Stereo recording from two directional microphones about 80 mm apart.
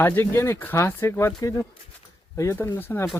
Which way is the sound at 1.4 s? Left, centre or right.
Left.